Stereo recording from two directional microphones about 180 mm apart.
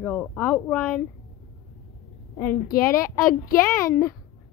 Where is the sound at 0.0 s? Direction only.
5° left (ahead or behind).